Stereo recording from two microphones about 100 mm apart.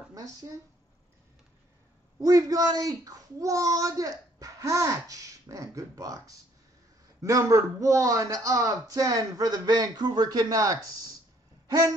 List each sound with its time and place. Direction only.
0.1 s speech: 35° right (ahead or behind)
2.1 s a child's voice: 35° right (ahead or behind)
11.6 s a sound: 40° right (ahead or behind)